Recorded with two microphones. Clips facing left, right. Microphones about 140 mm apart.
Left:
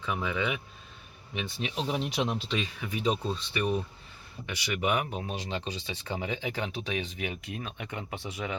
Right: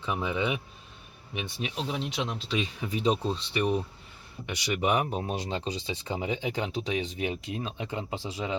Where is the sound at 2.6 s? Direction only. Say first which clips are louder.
Right 2 dB; 30° right (ahead or behind).